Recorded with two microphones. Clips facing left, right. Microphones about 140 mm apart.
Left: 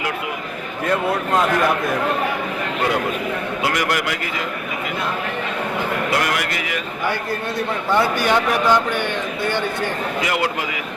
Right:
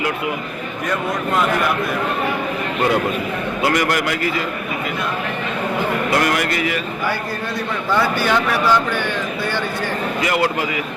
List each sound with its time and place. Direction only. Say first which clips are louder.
0.9 s speech: left 2 dB; 35° left (ahead or behind)
3.6 s a man's voice: right 4 dB; 10° left (ahead or behind)
6.2 s a man's voice: right 4 dB; 10° left (ahead or behind)